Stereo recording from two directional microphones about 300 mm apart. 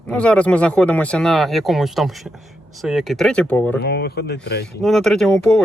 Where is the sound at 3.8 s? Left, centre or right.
Left.